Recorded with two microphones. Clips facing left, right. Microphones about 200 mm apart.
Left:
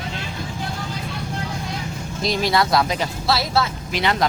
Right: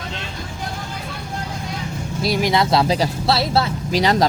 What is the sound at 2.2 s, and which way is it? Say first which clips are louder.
Speech: right 2 dB; 10° right (ahead or behind).